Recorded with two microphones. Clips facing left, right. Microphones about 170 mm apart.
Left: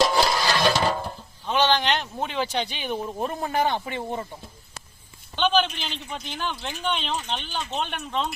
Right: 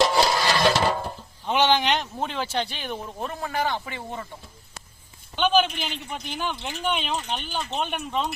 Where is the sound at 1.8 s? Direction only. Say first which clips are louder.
Right 1 dB; centre (ahead or behind); by 4.3 s 20° left (ahead or behind).